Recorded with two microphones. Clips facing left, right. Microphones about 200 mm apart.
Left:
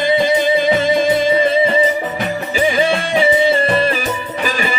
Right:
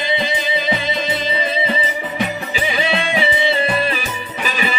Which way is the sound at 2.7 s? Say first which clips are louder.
Left 2 dB; 45° left (ahead or behind).